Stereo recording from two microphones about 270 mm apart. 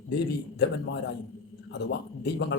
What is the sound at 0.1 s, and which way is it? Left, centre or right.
Speech, left.